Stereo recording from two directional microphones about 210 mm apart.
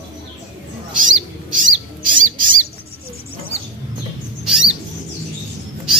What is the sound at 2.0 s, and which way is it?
Bird, 40° right (ahead or behind).